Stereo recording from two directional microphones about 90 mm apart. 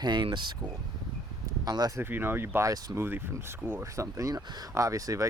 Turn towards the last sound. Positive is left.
turn(degrees=-40)  # may be behind; listen again after turning